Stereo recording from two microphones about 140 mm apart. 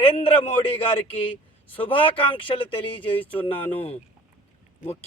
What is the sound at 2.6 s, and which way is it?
Speech, 35° left (ahead or behind).